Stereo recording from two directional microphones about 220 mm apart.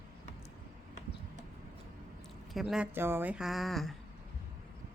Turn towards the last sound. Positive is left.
turn(degrees=0)  # may be behind; listen again after turning